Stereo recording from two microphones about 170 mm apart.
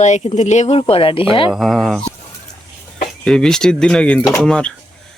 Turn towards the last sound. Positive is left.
turn(degrees=5)  # may be behind; listen again after turning